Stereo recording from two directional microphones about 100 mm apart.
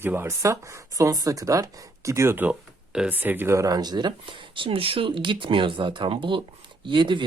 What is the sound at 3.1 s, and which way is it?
Speech, 20° right (ahead or behind).